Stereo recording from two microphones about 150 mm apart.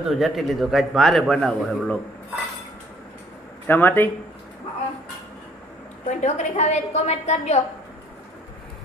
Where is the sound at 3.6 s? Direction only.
10° left (ahead or behind).